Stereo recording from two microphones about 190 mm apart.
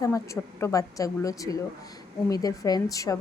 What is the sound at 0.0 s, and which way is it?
A woman's voice, 15° left (ahead or behind).